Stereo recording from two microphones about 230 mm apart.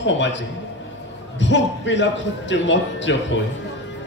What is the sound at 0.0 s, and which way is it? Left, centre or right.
Speech, left.